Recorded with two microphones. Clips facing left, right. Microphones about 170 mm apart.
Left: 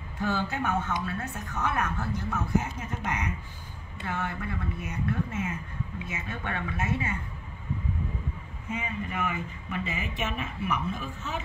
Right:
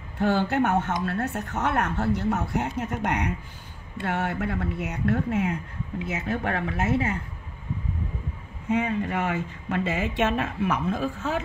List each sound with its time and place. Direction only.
0.2 s speech: 65° right (ahead or behind)
8.6 s speech: 75° right (ahead or behind); by 11.4 s 90° right